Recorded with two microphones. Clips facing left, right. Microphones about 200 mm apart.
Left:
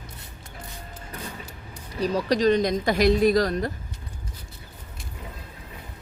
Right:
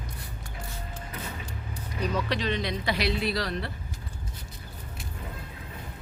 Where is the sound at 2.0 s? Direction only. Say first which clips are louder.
Left 8 dB; 35° left (ahead or behind).